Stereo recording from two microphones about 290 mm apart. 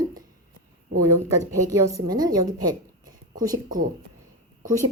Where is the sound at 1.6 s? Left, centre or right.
Centre.